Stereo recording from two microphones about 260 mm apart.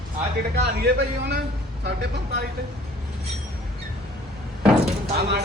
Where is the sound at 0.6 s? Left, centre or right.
Right.